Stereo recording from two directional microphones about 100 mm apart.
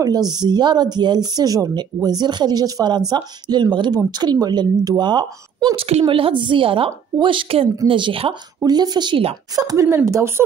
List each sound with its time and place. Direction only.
0.3 s a woman's voice: 45° right (ahead or behind)
5.8 s speech: 90° right
6.0 s a woman's voice: 60° right (ahead or behind)
8.6 s a woman's voice: 45° right (ahead or behind)
9.6 s speech: 35° right (ahead or behind)